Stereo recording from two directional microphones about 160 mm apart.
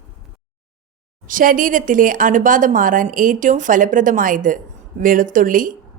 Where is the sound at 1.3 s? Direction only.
60° right (ahead or behind).